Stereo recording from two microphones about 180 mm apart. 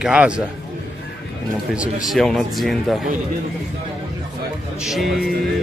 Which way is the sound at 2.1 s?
Centre (ahead or behind).